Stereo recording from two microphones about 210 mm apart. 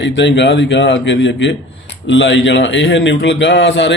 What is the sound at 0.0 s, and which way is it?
A man's voice, 60° left (ahead or behind).